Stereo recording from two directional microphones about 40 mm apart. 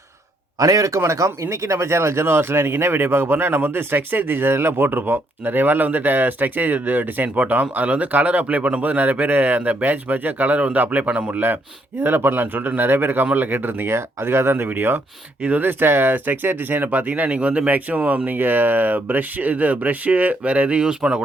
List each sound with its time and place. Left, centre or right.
1.5 s speech: right
12.0 s a man's voice: right
14.7 s a man's voice: right
15.8 s speech: right
18.3 s speech: right